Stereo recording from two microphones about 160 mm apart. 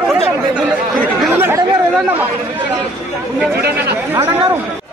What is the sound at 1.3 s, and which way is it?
Speech, 15° right (ahead or behind).